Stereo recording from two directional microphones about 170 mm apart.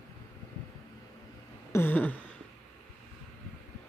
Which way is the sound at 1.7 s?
10° left (ahead or behind).